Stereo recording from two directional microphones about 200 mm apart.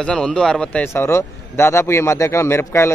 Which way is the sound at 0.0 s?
5° left (ahead or behind).